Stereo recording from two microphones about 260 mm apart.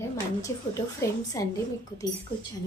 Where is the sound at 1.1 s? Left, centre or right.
Centre.